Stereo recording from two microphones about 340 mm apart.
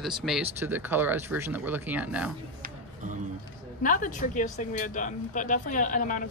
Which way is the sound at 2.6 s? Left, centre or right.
Right.